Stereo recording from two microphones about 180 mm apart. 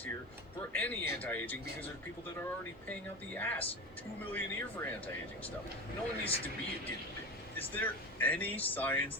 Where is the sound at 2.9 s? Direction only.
10° left (ahead or behind).